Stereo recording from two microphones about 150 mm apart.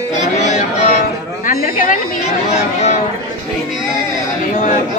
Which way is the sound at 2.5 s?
50° left (ahead or behind).